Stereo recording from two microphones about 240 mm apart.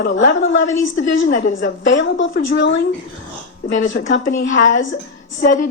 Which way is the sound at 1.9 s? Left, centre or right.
Left.